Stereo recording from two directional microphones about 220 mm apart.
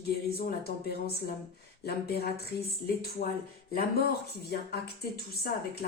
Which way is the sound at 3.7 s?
45° left (ahead or behind).